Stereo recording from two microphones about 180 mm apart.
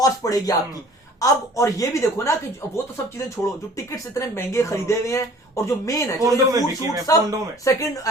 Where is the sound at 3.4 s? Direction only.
5° left (ahead or behind).